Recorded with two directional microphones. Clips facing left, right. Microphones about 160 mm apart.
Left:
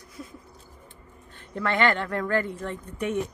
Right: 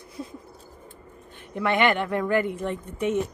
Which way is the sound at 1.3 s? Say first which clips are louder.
Right 3 dB; 15° right (ahead or behind).